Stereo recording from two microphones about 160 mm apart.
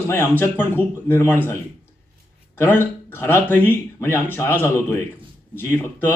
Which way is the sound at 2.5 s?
15° left (ahead or behind).